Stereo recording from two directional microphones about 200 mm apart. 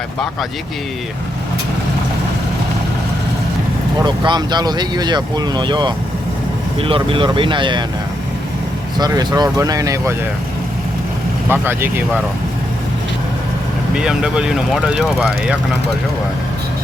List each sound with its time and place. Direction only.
4.0 s speech: 20° right (ahead or behind)
9.0 s speech: 20° right (ahead or behind)
11.4 s speech: 10° right (ahead or behind)
13.9 s speech: 5° right (ahead or behind)